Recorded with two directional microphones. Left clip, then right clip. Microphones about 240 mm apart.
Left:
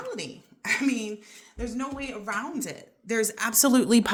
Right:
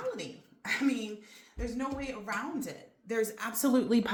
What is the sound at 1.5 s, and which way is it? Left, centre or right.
Speech, left.